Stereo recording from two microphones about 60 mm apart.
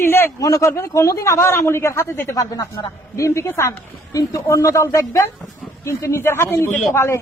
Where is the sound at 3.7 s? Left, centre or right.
Left.